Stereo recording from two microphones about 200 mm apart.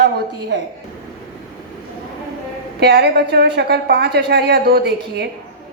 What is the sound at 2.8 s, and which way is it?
A woman's voice, 55° right (ahead or behind).